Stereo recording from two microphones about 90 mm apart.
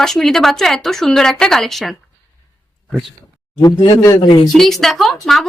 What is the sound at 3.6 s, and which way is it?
Speech, 55° left (ahead or behind).